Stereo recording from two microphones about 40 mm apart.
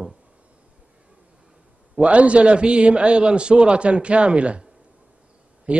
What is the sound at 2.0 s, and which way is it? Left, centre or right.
A man's voice, right.